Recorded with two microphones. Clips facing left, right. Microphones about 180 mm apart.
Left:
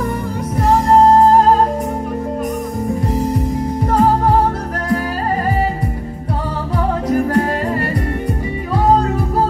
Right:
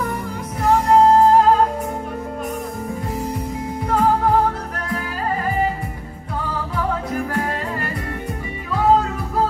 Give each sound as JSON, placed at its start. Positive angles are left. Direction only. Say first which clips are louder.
{"t": 0.6, "sound": "music", "louder": "left 2 dB", "side_deg": 40}
{"t": 3.9, "sound": "music", "louder": "left 3 dB", "side_deg": 40}
{"t": 7.1, "sound": "music", "louder": "left 8 dB", "side_deg": 40}